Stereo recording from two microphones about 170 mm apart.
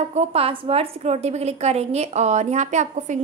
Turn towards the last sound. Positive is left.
turn(degrees=-45)  # may be behind; listen again after turning